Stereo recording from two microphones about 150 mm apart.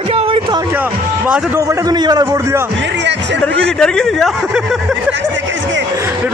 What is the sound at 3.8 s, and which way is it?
Speech, 5° left (ahead or behind).